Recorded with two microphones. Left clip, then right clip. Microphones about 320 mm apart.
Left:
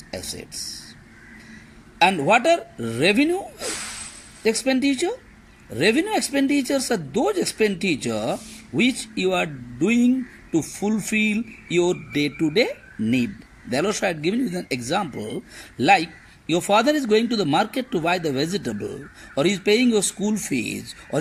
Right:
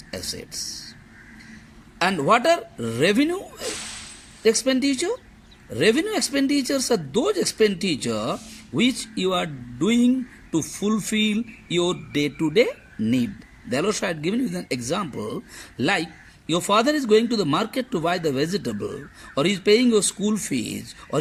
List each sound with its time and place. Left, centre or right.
0.1 s speech: centre
2.0 s speech: centre
4.4 s speech: centre